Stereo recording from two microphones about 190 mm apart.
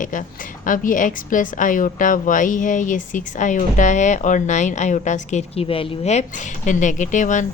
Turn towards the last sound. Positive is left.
turn(degrees=40)  # may be behind; listen again after turning